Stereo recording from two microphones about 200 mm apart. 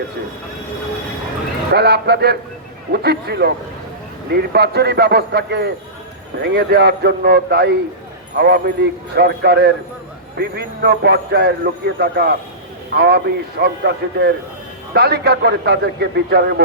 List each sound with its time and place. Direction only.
1.7 s a man's voice: 55° right (ahead or behind)
4.5 s a man's voice: 55° right (ahead or behind)